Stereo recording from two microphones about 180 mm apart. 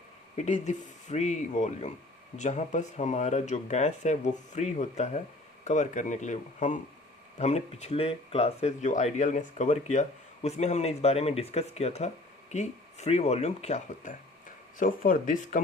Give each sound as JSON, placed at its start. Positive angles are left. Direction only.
{"t": 0.3, "sound": "speech", "side_deg": 40}